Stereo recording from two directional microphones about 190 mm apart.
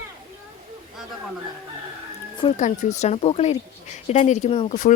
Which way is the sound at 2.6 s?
40° left (ahead or behind).